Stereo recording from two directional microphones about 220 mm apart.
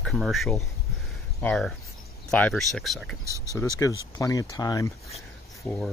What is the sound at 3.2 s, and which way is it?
Speech, 15° right (ahead or behind).